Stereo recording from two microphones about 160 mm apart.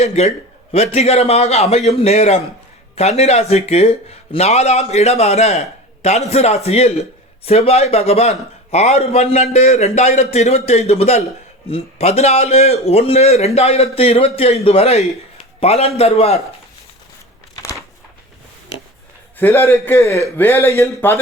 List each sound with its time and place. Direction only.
0.0 s speech: 45° left (ahead or behind)
17.5 s a sound: 20° left (ahead or behind)
19.4 s a man's voice: 15° left (ahead or behind)